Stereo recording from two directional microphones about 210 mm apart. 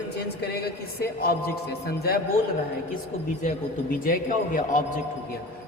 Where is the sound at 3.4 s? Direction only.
40° left (ahead or behind).